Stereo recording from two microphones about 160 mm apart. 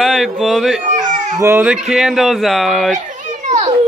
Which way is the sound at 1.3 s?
15° right (ahead or behind).